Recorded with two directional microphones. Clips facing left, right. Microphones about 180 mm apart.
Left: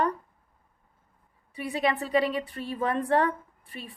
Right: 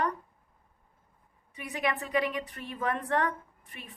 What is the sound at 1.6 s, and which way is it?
A woman's voice, 30° left (ahead or behind).